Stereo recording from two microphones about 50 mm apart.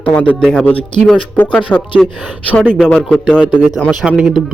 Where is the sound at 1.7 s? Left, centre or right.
Left.